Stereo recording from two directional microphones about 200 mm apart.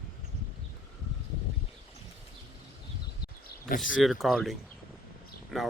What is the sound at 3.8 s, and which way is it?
Speech, centre (ahead or behind).